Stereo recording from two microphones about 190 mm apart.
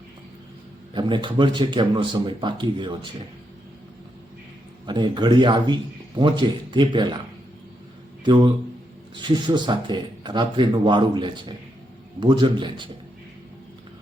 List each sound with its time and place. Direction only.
0.9 s speech: 25° right (ahead or behind)
4.9 s speech: 25° right (ahead or behind)
8.2 s speech: 25° right (ahead or behind)